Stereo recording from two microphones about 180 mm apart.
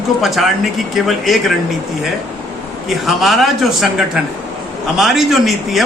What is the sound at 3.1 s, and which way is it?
A man's voice, centre (ahead or behind).